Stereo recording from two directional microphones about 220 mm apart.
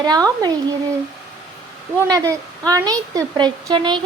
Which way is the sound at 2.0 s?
15° right (ahead or behind).